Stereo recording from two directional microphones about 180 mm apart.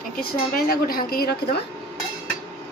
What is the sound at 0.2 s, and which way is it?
A woman's voice, 55° left (ahead or behind).